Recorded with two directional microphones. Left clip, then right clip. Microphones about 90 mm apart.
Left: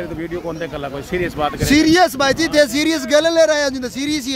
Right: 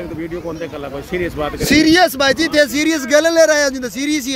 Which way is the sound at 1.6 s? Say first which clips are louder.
Right 2 dB; 35° left (ahead or behind).